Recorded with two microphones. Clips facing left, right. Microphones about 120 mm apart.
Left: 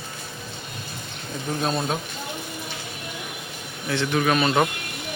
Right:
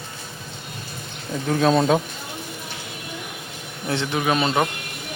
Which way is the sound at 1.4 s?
90° right.